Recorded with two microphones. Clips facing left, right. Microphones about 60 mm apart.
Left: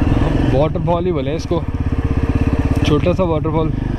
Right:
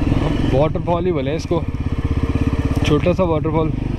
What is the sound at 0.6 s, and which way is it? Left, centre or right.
Speech, centre.